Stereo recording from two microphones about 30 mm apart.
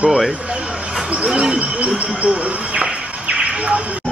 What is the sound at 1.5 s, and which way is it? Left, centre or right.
Bird, right.